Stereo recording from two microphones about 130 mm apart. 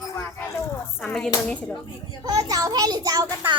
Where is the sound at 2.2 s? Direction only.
30° right (ahead or behind).